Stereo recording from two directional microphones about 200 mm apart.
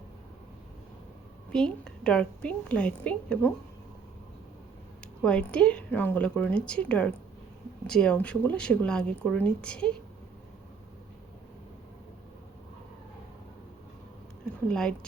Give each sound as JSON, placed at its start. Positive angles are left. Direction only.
{"t": 1.5, "sound": "a woman's voice", "side_deg": 5}
{"t": 5.2, "sound": "speech", "side_deg": 5}
{"t": 14.7, "sound": "speech", "side_deg": 5}